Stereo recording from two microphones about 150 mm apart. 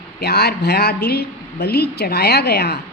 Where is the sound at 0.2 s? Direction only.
90° left.